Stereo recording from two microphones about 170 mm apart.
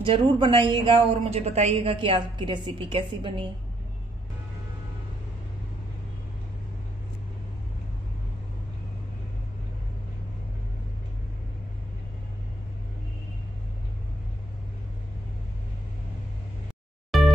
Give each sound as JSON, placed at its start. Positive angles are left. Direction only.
{"t": 0.0, "sound": "speech", "side_deg": -30}
{"t": 17.1, "sound": "music", "side_deg": 0}